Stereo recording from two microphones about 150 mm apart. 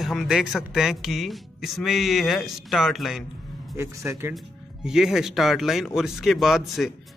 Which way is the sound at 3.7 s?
20° right (ahead or behind).